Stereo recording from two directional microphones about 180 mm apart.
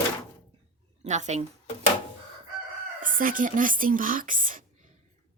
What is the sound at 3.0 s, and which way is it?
Speech, 50° right (ahead or behind).